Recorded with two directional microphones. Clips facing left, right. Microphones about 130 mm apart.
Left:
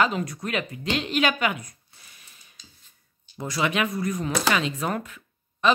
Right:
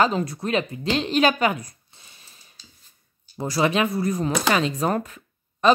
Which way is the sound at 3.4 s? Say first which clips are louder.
Right 4 dB; 35° right (ahead or behind).